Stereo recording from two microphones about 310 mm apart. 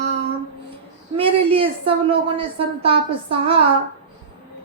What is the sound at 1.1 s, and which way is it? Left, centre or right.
Speech, centre.